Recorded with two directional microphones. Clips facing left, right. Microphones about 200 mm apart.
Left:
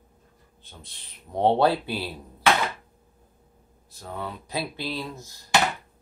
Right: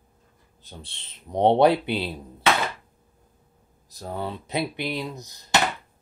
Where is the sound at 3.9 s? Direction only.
35° right (ahead or behind); by 5.6 s 20° right (ahead or behind).